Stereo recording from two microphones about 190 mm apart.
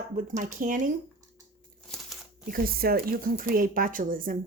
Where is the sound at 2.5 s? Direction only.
50° right (ahead or behind).